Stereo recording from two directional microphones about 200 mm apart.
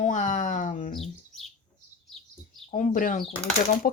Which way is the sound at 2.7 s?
40° left (ahead or behind).